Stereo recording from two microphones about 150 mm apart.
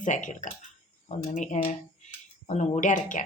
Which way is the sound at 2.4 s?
45° left (ahead or behind).